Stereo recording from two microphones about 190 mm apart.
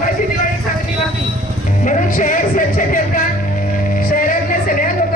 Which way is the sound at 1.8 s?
40° left (ahead or behind).